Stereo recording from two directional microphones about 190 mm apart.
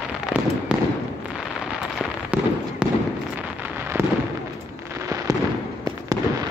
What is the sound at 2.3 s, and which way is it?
Fireworks, 10° right (ahead or behind).